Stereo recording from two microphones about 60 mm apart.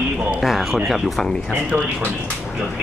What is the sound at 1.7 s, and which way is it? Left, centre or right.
Speech, right.